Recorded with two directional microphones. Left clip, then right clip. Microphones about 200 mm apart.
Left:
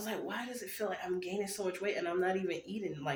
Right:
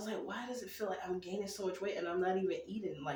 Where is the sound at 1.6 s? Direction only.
10° left (ahead or behind).